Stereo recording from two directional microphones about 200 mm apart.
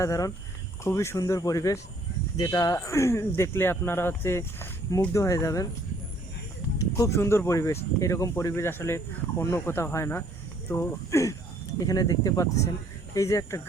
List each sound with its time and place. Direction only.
0.0 s speech: 15° left (ahead or behind)
6.7 s speech: 15° left (ahead or behind)